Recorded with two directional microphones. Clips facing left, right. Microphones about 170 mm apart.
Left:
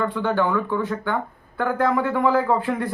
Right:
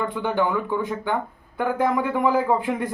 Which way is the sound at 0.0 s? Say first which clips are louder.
Left 1 dB; 15° right (ahead or behind).